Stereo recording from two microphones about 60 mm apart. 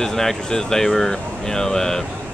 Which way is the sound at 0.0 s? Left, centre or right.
Centre.